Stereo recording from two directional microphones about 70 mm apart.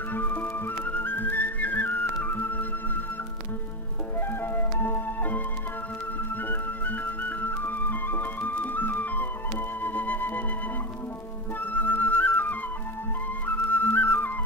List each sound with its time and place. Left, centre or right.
0.1 s music: left
4.3 s music: left
6.4 s music: left
11.6 s flute: left